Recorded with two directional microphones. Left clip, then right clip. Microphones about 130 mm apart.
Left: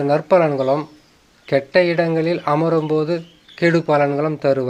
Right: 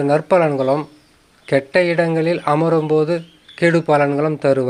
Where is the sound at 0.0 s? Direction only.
15° right (ahead or behind).